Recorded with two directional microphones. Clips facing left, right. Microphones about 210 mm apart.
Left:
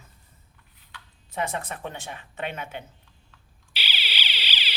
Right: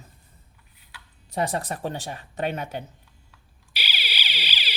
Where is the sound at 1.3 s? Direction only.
35° right (ahead or behind).